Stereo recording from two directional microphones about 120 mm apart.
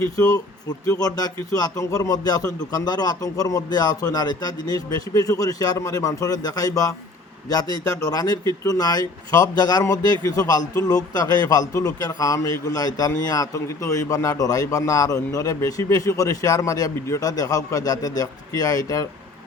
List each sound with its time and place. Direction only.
0.9 s a man's voice: 30° left (ahead or behind)